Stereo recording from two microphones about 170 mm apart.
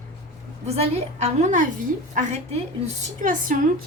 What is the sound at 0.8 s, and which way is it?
Speech, 40° right (ahead or behind).